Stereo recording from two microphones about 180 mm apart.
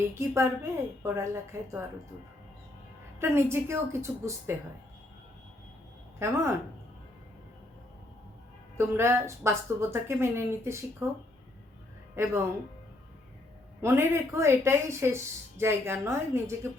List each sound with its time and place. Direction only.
0.1 s speech: 15° right (ahead or behind)
3.2 s speech: 15° right (ahead or behind)
6.1 s speech: 15° right (ahead or behind)
8.8 s speech: 15° right (ahead or behind)
12.1 s speech: 15° right (ahead or behind)
13.8 s speech: 15° right (ahead or behind)